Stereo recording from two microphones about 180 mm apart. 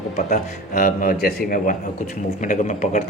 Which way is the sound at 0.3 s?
45° left (ahead or behind).